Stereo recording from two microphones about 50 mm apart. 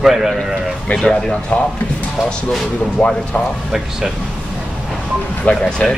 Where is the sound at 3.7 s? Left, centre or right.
Centre.